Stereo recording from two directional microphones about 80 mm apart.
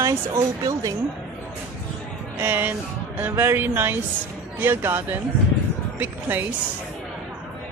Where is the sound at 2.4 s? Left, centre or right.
Right.